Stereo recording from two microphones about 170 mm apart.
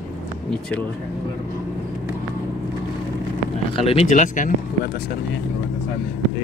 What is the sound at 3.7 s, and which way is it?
Speech, 35° left (ahead or behind).